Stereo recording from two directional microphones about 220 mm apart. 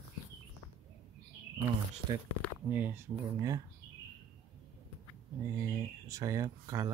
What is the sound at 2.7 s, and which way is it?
Speech, 10° right (ahead or behind).